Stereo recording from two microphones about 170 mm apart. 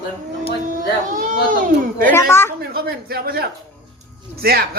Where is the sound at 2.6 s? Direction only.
65° right (ahead or behind).